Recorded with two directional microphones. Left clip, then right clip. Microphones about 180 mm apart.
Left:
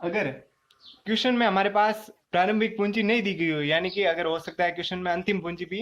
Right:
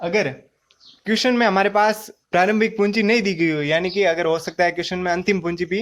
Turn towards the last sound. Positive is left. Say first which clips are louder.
# right 8 dB
turn(degrees=-40)  # may be behind; listen again after turning